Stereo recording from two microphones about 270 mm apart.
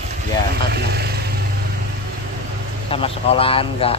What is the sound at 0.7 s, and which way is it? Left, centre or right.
Speech, right.